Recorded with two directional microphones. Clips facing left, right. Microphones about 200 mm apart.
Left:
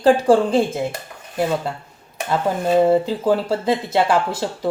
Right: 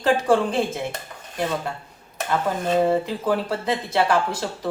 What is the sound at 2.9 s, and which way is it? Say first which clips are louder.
Speech: left 5 dB; 30° left (ahead or behind).